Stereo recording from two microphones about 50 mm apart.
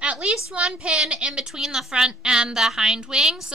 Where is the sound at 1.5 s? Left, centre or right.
Centre.